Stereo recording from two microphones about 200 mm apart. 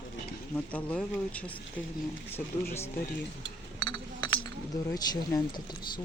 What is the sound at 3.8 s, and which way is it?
Chink, 20° left (ahead or behind).